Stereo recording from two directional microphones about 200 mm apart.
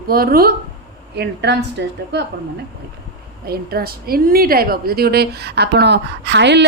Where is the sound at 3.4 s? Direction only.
50° right (ahead or behind).